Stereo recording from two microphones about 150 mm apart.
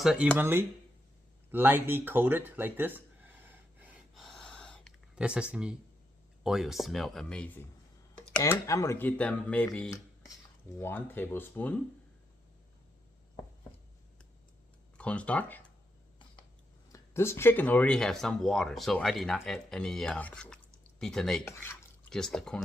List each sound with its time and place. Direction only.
0.0 s speech: 5° right (ahead or behind)
0.3 s speech: 15° right (ahead or behind)
4.1 s a sound: centre (ahead or behind)
5.2 s speech: 5° right (ahead or behind); by 11.7 s 15° left (ahead or behind)
14.9 s speech: 10° left (ahead or behind)
16.9 s speech: 15° left (ahead or behind)
21.4 s speech: 15° left (ahead or behind)
22.1 s speech: 5° left (ahead or behind)